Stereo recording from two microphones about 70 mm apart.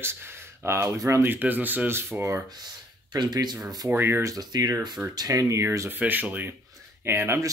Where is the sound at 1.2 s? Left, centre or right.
Right.